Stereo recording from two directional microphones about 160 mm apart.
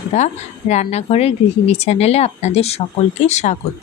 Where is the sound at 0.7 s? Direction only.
45° left (ahead or behind).